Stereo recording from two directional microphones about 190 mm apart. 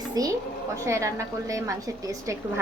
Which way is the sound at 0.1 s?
20° right (ahead or behind).